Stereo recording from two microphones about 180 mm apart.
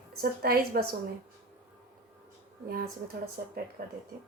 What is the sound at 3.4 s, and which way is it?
Speech, 55° right (ahead or behind).